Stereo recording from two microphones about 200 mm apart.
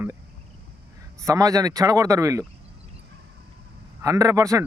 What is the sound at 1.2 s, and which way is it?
Speech, 15° right (ahead or behind).